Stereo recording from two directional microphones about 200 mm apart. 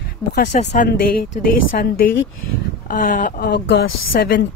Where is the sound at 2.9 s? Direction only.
40° left (ahead or behind).